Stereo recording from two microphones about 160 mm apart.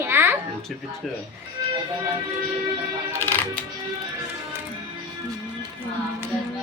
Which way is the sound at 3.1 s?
15° left (ahead or behind).